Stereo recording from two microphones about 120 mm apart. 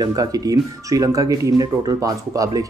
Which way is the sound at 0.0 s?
30° right (ahead or behind).